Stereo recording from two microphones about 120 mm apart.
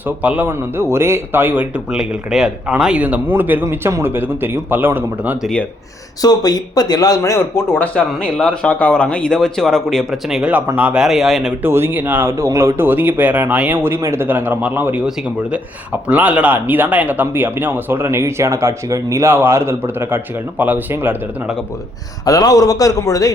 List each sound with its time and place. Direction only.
0.2 s speech: 15° right (ahead or behind)
5.4 s speech: 5° left (ahead or behind)
6.2 s speech: 35° left (ahead or behind)
7.9 s speech: 5° left (ahead or behind)
11.6 s speech: 20° right (ahead or behind)
22.3 s a man's voice: 30° left (ahead or behind)